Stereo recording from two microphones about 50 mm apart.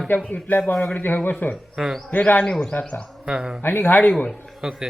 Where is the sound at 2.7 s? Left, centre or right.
Left.